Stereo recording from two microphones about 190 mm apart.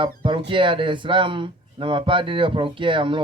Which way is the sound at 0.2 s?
25° right (ahead or behind).